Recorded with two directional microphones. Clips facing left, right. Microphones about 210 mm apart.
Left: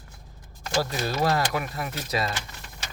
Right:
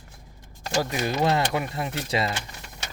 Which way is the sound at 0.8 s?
15° right (ahead or behind).